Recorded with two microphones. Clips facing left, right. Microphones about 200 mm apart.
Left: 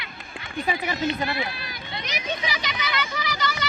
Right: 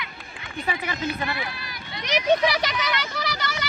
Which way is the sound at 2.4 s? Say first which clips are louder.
Right 8 dB; 70° right (ahead or behind).